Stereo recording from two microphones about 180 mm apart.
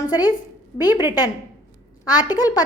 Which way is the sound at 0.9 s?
10° right (ahead or behind).